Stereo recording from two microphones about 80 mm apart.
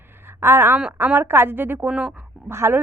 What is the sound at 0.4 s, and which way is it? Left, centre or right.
A woman's voice, right.